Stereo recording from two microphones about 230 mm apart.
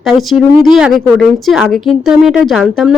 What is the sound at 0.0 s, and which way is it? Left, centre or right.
A woman's voice, centre.